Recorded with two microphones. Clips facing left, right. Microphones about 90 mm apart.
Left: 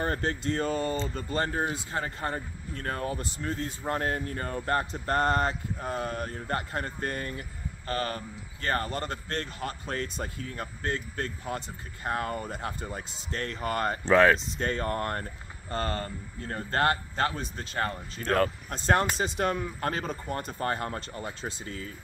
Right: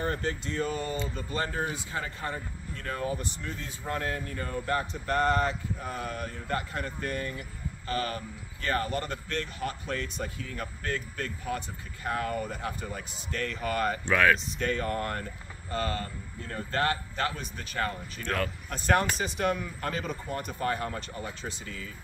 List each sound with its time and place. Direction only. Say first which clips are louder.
0.0 s speech: left 2 dB; 40° left (ahead or behind)